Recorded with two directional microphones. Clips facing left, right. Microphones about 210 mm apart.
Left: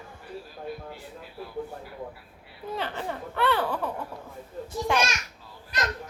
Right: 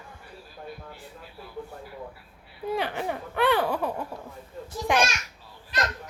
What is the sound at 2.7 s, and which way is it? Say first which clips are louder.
Speech: right 2 dB; 15° right (ahead or behind).